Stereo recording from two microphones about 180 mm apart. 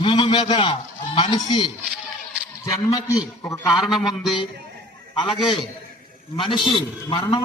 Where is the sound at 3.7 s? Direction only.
Centre (ahead or behind).